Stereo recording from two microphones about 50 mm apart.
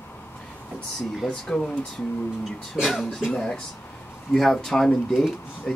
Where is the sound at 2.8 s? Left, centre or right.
Centre.